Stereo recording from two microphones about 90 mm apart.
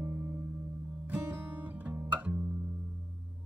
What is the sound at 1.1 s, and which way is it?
Guitar, 20° right (ahead or behind).